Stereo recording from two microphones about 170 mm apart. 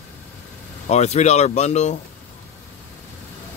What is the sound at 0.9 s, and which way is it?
Speech, 40° left (ahead or behind).